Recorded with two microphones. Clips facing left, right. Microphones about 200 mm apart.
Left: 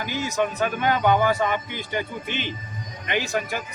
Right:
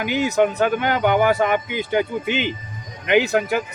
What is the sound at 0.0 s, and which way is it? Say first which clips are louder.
A man's voice: right 7 dB; 65° right (ahead or behind).